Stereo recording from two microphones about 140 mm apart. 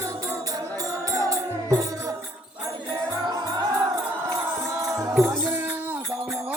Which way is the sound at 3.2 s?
30° right (ahead or behind).